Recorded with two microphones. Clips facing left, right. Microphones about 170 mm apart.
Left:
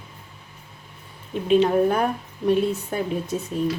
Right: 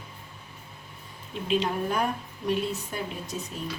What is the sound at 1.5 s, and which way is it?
A woman's voice, 55° left (ahead or behind).